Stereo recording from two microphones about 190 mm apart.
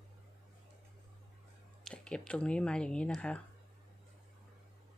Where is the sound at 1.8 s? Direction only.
5° left (ahead or behind).